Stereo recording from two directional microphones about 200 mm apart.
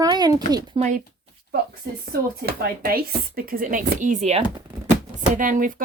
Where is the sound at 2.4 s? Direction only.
50° right (ahead or behind).